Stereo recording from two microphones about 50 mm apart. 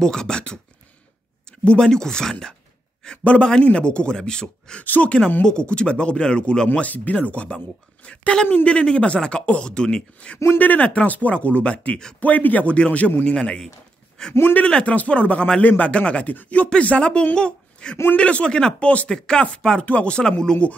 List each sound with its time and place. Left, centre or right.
0.0 s speech: centre
1.6 s speech: centre
4.8 s speech: left
5.4 s speech: centre
10.6 s speech: left; by 14.3 s centre
14.6 s speech: left
19.8 s speech: left